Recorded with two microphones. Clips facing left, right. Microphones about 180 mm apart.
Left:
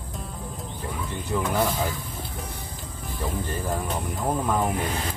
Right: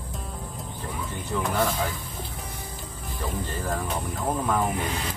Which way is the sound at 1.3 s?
15° left (ahead or behind).